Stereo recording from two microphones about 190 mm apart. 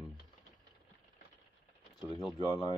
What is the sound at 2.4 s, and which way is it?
Speech, 20° left (ahead or behind).